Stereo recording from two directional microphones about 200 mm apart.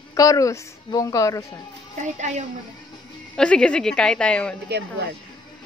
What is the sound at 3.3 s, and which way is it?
Child singing, 5° left (ahead or behind).